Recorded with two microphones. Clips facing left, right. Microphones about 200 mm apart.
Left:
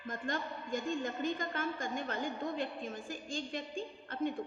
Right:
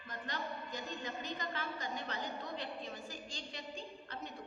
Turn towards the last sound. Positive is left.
turn(degrees=50)  # may be behind; listen again after turning